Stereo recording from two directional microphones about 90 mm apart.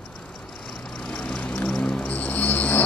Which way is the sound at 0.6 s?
5° left (ahead or behind).